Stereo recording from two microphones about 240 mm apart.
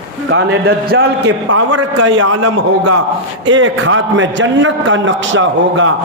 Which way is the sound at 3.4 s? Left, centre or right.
Right.